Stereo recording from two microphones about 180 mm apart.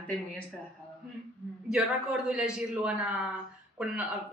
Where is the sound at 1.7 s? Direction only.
5° right (ahead or behind).